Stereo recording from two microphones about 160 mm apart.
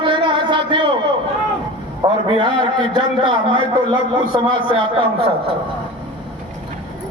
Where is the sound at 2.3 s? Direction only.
30° right (ahead or behind).